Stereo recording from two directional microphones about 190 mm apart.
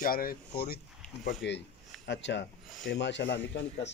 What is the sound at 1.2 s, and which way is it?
Speech, 65° left (ahead or behind).